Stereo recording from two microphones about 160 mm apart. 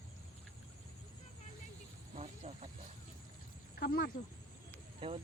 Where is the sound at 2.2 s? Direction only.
45° right (ahead or behind).